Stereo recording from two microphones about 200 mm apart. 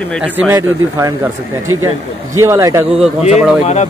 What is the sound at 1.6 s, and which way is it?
Speech, 90° right.